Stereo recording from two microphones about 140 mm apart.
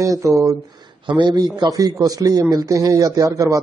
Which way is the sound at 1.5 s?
25° right (ahead or behind).